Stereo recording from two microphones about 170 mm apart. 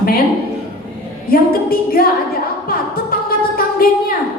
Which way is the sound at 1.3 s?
60° left (ahead or behind).